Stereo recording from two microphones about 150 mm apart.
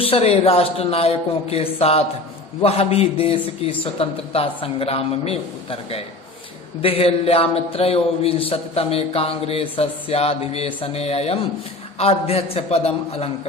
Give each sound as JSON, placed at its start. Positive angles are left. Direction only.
{"t": 0.0, "sound": "a man's voice", "side_deg": 40}